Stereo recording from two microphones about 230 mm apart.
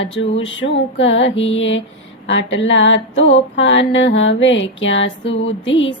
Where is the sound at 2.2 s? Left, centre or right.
Left.